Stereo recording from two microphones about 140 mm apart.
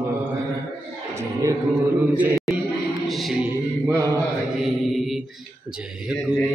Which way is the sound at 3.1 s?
Centre (ahead or behind).